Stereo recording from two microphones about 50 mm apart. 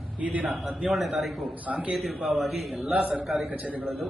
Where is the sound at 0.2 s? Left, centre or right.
Right.